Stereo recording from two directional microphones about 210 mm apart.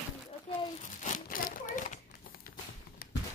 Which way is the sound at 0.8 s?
35° left (ahead or behind).